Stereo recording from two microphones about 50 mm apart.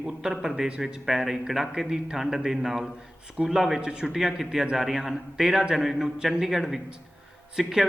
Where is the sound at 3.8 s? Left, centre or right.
Centre.